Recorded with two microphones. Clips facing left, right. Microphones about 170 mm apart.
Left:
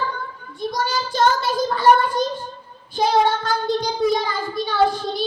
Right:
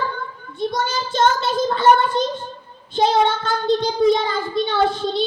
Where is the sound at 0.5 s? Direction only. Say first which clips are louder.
Right 1 dB; 25° right (ahead or behind).